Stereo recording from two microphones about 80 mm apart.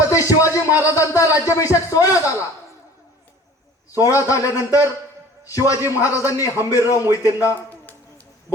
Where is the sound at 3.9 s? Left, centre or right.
Left.